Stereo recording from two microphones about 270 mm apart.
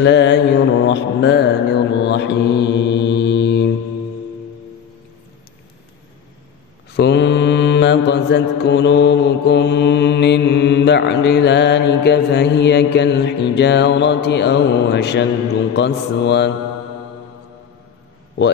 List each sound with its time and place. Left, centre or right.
0.0 s mantra: left
6.9 s mantra: left